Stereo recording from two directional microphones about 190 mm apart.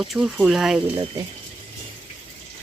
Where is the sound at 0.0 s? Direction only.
Centre (ahead or behind).